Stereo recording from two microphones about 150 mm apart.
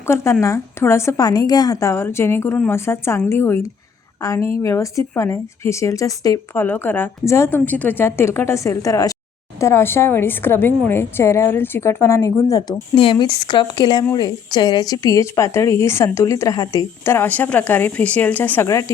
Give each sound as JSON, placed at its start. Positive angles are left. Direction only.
{"t": 0.0, "sound": "a woman's voice", "side_deg": 15}